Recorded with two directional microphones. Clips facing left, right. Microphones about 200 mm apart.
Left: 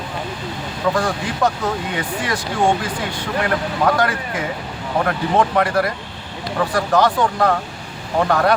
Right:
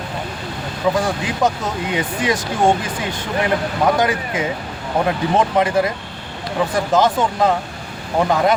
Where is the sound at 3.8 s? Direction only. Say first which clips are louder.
Right 2 dB; 15° right (ahead or behind).